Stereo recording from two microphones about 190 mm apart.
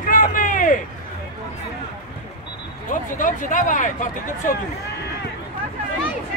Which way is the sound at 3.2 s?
45° left (ahead or behind).